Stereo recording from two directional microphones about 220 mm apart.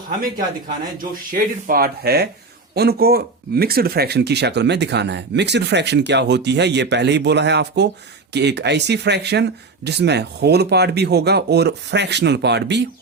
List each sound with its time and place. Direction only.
1.1 s speech: 40° right (ahead or behind)